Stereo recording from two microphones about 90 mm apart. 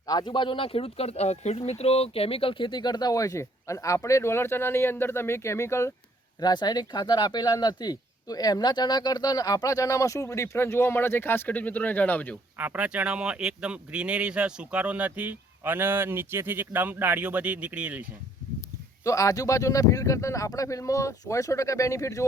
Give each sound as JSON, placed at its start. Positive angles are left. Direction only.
{"t": 0.1, "sound": "speech", "side_deg": 55}
{"t": 2.0, "sound": "speech", "side_deg": 90}
{"t": 6.4, "sound": "speech", "side_deg": 50}
{"t": 12.5, "sound": "speech", "side_deg": -15}
{"t": 19.0, "sound": "speech", "side_deg": 35}